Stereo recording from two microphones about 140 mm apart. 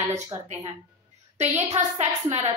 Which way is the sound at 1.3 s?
50° right (ahead or behind).